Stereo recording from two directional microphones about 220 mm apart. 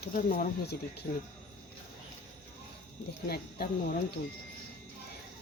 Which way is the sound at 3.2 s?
45° left (ahead or behind).